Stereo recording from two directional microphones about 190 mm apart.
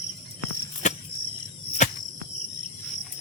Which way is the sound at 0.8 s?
40° left (ahead or behind).